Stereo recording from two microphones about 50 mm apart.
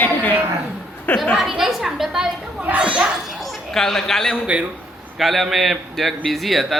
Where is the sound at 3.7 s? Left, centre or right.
Centre.